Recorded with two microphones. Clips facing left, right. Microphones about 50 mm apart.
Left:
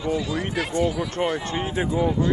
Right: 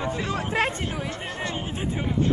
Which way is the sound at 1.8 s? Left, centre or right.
Right.